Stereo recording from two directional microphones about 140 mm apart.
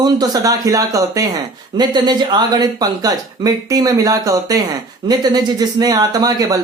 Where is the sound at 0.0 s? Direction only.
25° right (ahead or behind).